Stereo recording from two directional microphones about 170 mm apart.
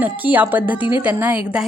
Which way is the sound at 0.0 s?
10° right (ahead or behind).